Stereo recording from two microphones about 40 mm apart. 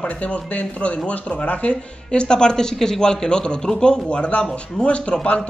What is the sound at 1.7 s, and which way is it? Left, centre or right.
Speech, left.